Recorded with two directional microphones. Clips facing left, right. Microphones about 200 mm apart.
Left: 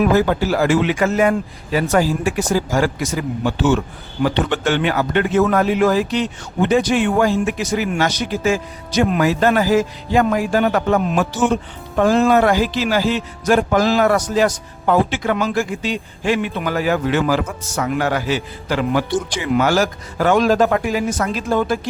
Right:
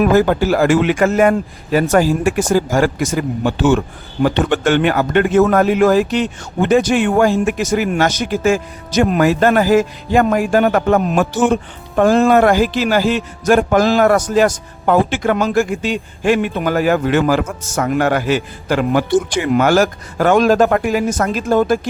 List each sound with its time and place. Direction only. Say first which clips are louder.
0.0 s speech: right 3 dB; 50° right (ahead or behind)